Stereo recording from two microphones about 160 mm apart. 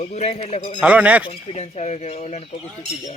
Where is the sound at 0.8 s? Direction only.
10° right (ahead or behind).